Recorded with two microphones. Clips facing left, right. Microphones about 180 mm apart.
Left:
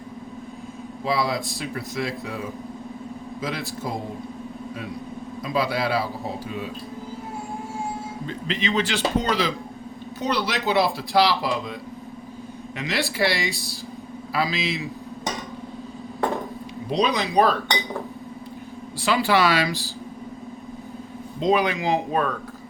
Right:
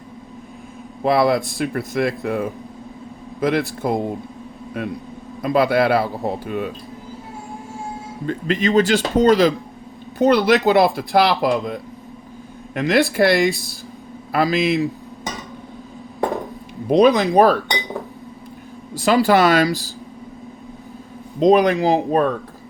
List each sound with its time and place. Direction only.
1.0 s a man's voice: 55° right (ahead or behind)
5.4 s a man's voice: 55° right (ahead or behind)
8.3 s speech: 50° right (ahead or behind)
10.2 s a man's voice: 55° right (ahead or behind)
16.9 s speech: 45° right (ahead or behind)
18.9 s speech: 40° right (ahead or behind)
21.4 s speech: 40° right (ahead or behind)